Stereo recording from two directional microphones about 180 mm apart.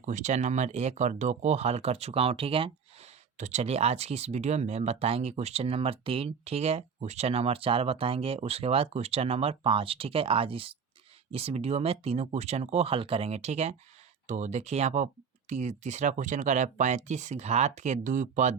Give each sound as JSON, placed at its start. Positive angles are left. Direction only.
{"t": 0.0, "sound": "speech", "side_deg": -40}